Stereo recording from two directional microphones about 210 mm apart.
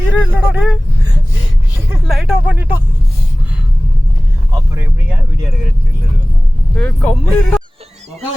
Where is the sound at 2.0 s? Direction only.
Centre (ahead or behind).